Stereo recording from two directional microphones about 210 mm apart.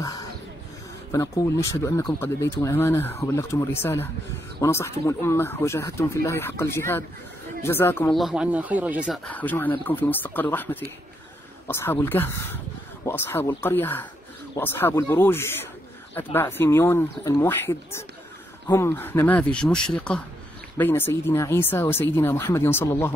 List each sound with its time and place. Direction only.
0.0 s a sound: 15° left (ahead or behind)
1.1 s speech: 15° left (ahead or behind)
8.2 s speech: 5° right (ahead or behind)